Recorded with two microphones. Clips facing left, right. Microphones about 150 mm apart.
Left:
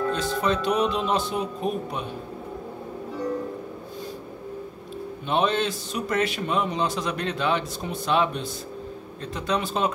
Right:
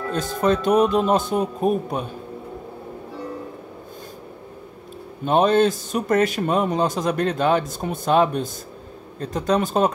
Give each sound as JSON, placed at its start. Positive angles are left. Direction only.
{"t": 0.1, "sound": "a man's voice", "side_deg": -45}
{"t": 5.2, "sound": "a man's voice", "side_deg": -45}